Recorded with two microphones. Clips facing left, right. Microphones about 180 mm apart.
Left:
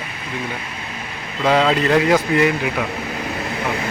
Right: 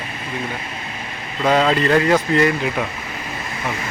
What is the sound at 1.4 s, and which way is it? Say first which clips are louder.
Speech: even; 10° right (ahead or behind).